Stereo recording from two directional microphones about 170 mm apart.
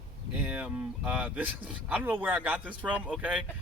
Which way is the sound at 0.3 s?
10° right (ahead or behind).